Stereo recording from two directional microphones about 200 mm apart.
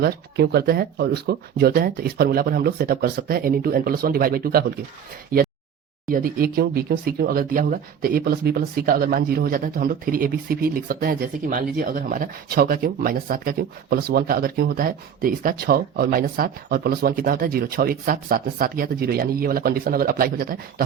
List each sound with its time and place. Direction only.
0.0 s speech: 55° right (ahead or behind)
5.3 s a sound: 45° right (ahead or behind)
6.1 s speech: 45° right (ahead or behind)